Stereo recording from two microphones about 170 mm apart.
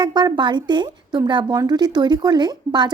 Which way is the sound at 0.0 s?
25° right (ahead or behind).